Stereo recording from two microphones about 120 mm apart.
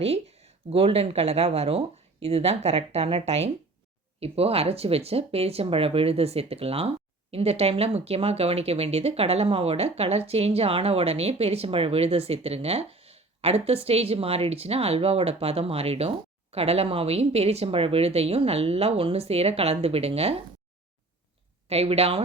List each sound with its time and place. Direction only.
0.0 s speech: 60° right (ahead or behind)
21.7 s speech: 60° right (ahead or behind)